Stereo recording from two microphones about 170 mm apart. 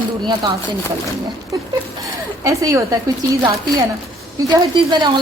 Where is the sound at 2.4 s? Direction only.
20° right (ahead or behind).